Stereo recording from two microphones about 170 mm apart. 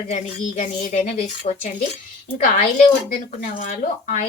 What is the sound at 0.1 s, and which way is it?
Cutlery, 50° left (ahead or behind).